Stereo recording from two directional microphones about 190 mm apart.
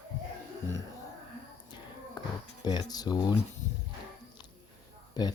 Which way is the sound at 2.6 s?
20° left (ahead or behind).